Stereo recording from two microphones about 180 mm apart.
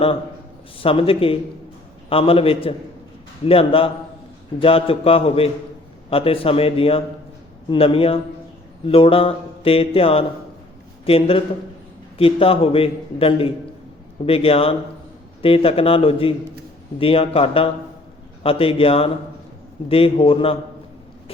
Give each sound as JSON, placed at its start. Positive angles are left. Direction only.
{"t": 0.8, "sound": "a man's voice", "side_deg": 30}